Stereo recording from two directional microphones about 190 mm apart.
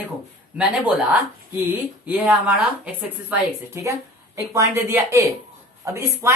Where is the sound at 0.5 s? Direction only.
5° right (ahead or behind).